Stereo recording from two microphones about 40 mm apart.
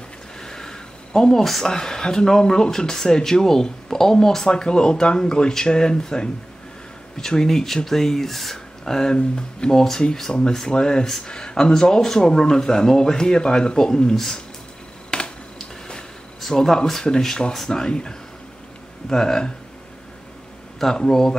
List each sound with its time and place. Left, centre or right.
0.4 s a sound: centre
1.4 s speech: centre
1.7 s speech: centre
15.0 s computer keyboard: left
16.5 s speech: centre
20.8 s speech: centre